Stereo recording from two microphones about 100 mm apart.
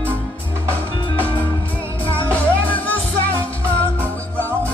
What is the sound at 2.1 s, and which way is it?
Music, 15° left (ahead or behind).